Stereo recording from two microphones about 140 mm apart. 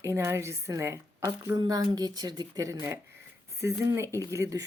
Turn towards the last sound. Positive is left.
turn(degrees=-20)  # may be behind; listen again after turning